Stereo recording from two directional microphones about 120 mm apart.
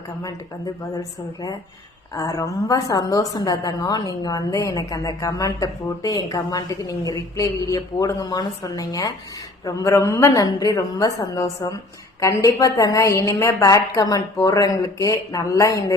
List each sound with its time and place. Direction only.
0.9 s a woman's voice: 30° left (ahead or behind)